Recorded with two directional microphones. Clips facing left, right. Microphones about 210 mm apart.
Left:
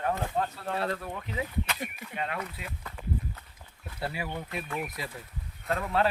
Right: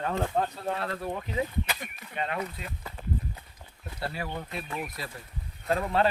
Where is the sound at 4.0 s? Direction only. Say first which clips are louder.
Even; 10° left (ahead or behind).